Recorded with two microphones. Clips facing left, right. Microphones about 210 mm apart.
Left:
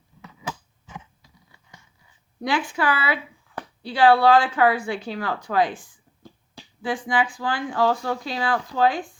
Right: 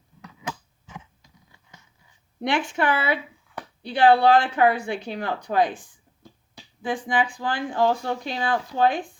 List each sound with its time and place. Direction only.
2.4 s speech: 25° right (ahead or behind)
6.8 s speech: 20° right (ahead or behind)